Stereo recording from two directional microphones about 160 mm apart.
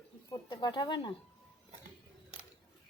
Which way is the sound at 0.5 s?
25° left (ahead or behind).